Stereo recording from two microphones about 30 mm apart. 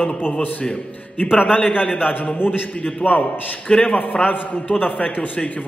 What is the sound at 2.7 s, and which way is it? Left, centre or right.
Speech, left.